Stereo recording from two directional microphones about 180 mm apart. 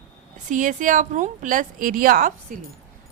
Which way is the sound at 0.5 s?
45° right (ahead or behind).